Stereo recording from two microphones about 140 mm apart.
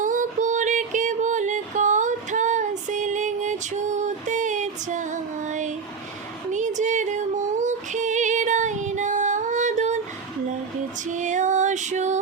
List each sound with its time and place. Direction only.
0.0 s music: 65° right (ahead or behind)
11.1 s music: 60° right (ahead or behind)